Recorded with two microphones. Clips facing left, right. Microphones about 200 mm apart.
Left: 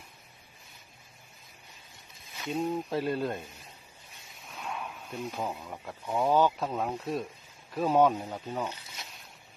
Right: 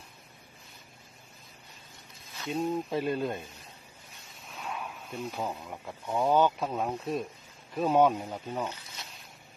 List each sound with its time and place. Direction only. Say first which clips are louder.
2.4 s speech: even; centre (ahead or behind)
4.4 s snake: even; centre (ahead or behind)
6.1 s speech: even; centre (ahead or behind)